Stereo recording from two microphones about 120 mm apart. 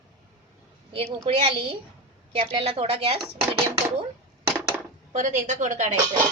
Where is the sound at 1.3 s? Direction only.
50° right (ahead or behind).